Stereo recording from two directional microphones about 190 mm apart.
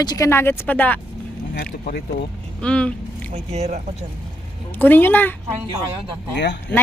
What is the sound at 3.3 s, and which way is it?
Speech, 35° right (ahead or behind).